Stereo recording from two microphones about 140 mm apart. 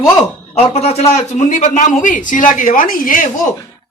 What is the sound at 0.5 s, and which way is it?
A man's voice, 45° left (ahead or behind).